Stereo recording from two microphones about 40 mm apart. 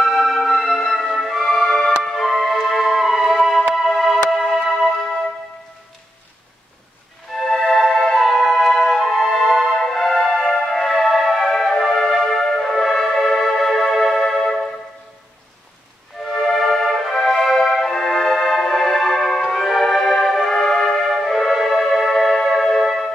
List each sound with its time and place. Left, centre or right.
0.0 s music: centre
1.8 s music: centre
7.3 s music: centre
9.2 s music: centre
9.8 s music: centre
16.3 s music: centre
17.1 s music: centre
20.5 s music: centre
21.0 s music: centre